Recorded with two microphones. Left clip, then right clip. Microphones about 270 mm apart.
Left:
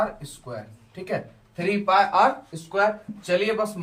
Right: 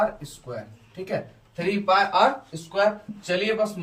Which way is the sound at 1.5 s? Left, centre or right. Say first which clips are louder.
Left 1 dB; centre.